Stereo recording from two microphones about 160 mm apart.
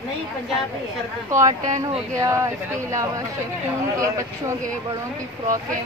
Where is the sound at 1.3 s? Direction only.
20° right (ahead or behind).